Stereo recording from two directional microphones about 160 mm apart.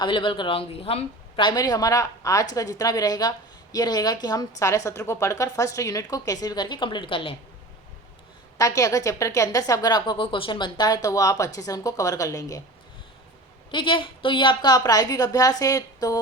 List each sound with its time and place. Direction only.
0.0 s speech: 30° left (ahead or behind)
8.5 s speech: 20° left (ahead or behind)
13.7 s speech: 30° left (ahead or behind)